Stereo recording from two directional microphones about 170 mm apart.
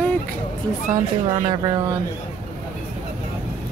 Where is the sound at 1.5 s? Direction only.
20° right (ahead or behind).